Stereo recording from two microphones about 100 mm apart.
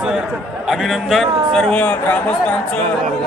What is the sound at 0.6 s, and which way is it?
A man's voice, centre (ahead or behind).